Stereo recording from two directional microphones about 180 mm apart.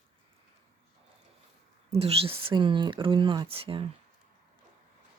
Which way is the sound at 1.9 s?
35° right (ahead or behind).